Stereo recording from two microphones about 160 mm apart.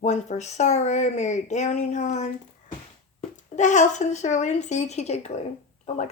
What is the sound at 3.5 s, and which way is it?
Speech, 50° left (ahead or behind).